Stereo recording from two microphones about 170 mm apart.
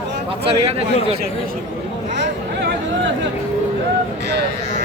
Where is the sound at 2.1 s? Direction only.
90° right.